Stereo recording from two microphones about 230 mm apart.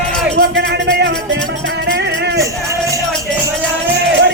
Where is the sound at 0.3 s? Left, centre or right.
Right.